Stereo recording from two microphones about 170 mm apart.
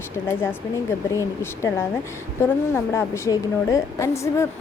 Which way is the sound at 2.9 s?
15° left (ahead or behind).